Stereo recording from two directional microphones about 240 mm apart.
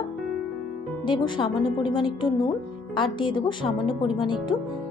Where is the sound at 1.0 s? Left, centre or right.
Centre.